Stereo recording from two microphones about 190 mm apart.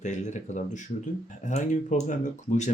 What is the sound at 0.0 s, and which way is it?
Speech, 40° left (ahead or behind).